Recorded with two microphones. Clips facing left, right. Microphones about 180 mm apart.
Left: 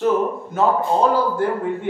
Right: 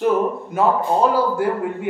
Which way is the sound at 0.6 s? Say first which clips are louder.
Even; 10° right (ahead or behind).